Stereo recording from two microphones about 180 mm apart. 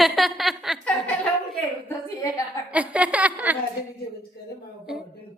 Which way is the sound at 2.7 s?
10° right (ahead or behind).